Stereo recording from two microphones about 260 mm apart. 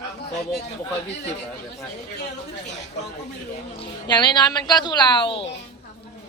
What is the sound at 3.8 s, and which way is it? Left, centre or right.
A woman's voice, centre.